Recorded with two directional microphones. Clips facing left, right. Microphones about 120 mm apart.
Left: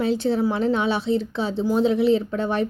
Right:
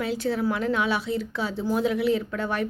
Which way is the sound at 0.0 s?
25° left (ahead or behind).